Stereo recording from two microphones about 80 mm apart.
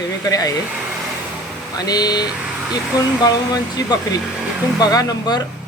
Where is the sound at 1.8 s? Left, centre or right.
Left.